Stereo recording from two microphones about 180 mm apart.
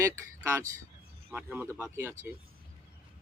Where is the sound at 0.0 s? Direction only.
15° right (ahead or behind).